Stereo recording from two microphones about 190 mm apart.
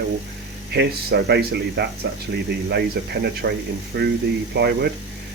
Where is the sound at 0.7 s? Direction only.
60° right (ahead or behind).